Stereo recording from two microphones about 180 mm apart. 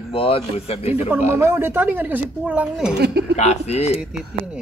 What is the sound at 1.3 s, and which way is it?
Speech, 15° right (ahead or behind).